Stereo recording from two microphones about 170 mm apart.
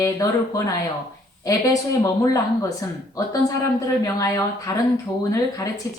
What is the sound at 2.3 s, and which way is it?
Speech, 20° left (ahead or behind).